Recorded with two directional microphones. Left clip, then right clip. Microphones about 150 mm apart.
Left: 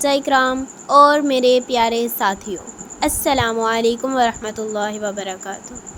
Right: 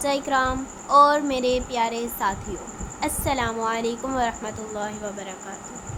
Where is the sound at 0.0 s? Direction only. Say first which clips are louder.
Left 7 dB; 35° left (ahead or behind).